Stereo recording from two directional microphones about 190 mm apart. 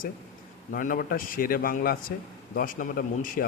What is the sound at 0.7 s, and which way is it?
A man's voice, 45° left (ahead or behind).